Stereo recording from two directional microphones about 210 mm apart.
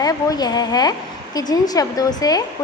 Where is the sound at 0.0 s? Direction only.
15° left (ahead or behind).